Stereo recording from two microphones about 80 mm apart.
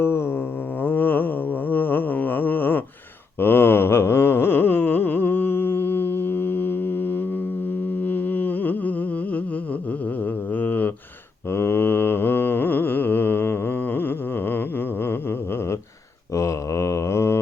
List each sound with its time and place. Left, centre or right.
0.0 s mantra: left
1.7 s a sound: left
8.0 s humming: left
10.5 s mantra: left
16.3 s mantra: left